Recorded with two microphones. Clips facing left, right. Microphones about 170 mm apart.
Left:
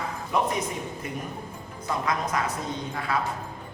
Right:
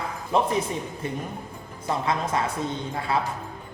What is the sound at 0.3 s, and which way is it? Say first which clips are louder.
Speech: right 3 dB; 30° right (ahead or behind).